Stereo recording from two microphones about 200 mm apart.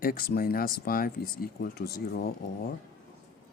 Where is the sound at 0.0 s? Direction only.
45° left (ahead or behind).